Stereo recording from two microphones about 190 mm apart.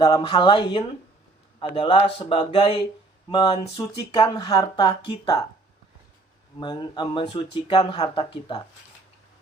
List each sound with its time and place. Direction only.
0.0 s speech: 25° left (ahead or behind)
6.6 s speech: 25° left (ahead or behind)